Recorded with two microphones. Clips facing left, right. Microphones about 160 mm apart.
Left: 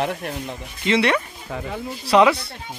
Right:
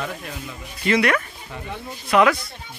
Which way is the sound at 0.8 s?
25° left (ahead or behind).